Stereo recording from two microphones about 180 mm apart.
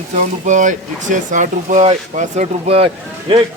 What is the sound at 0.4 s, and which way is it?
Speech, 45° right (ahead or behind).